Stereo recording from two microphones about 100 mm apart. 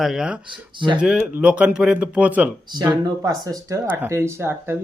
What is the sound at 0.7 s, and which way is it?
Speech, 55° right (ahead or behind).